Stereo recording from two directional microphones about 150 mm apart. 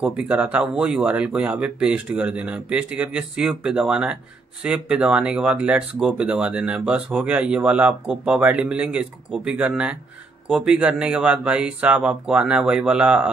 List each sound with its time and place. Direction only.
0.0 s speech: 5° right (ahead or behind)